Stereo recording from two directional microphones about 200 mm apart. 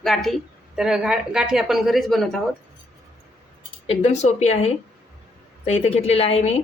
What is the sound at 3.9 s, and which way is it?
A woman's voice, 30° left (ahead or behind).